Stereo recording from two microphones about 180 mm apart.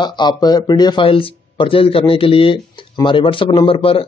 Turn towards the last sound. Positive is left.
turn(degrees=30)  # may be behind; listen again after turning